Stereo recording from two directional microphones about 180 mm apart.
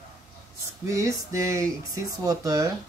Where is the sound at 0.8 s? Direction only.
15° right (ahead or behind).